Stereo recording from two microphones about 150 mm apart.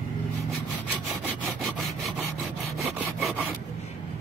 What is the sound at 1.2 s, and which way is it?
Wood, 5° left (ahead or behind).